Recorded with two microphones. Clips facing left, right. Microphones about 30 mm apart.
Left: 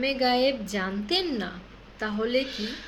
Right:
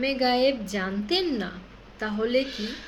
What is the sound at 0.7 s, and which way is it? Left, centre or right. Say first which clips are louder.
Speech: even; centre.